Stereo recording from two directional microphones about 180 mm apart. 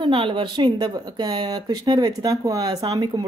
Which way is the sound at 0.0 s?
30° right (ahead or behind).